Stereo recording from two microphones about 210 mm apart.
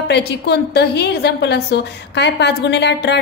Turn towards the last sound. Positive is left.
turn(degrees=55)  # may be behind; listen again after turning